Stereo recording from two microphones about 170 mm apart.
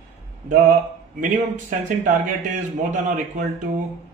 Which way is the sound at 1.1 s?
50° right (ahead or behind).